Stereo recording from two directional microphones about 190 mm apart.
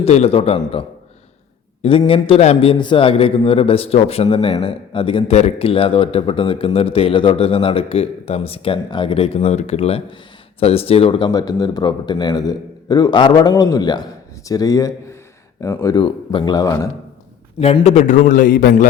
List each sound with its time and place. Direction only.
0.0 s a man's voice: 30° left (ahead or behind); by 16.9 s 15° left (ahead or behind)
17.6 s a man's voice: 35° left (ahead or behind)